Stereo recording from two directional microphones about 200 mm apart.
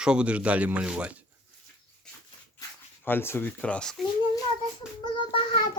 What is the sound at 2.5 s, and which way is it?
Speech, 10° left (ahead or behind).